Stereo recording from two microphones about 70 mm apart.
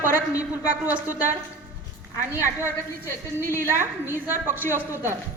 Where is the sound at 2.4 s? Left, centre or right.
Right.